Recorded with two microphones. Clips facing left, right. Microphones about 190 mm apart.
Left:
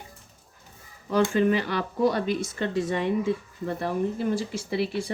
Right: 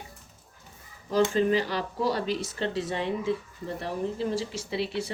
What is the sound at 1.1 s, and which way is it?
Speech, 60° left (ahead or behind).